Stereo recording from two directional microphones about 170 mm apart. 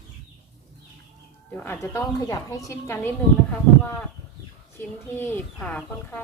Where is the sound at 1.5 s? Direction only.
10° left (ahead or behind).